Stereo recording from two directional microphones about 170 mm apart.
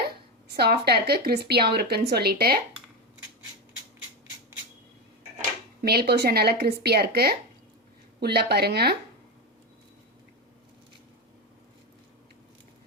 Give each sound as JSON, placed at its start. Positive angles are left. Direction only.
{"t": 0.5, "sound": "speech", "side_deg": -70}
{"t": 5.8, "sound": "speech", "side_deg": -70}